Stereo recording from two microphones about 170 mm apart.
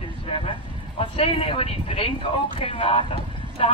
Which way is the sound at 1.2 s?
35° left (ahead or behind).